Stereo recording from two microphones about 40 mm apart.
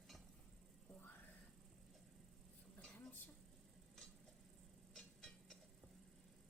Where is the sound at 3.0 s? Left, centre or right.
Left.